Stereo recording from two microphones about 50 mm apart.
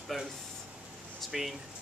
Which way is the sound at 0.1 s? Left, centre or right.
Centre.